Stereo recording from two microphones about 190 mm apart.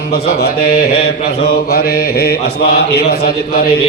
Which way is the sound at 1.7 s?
55° left (ahead or behind).